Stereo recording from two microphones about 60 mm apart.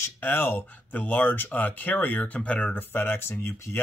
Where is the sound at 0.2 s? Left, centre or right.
Left.